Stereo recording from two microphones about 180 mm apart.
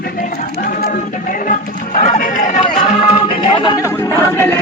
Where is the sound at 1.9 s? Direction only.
45° left (ahead or behind).